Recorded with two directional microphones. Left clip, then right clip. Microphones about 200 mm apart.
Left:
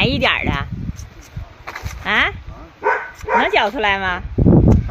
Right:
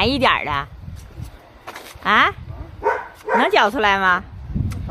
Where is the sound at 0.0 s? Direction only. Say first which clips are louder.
Even; 15° right (ahead or behind).